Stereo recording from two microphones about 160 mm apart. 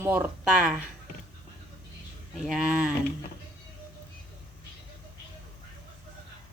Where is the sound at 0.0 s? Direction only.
15° right (ahead or behind).